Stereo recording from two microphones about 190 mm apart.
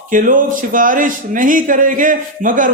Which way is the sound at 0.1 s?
45° right (ahead or behind).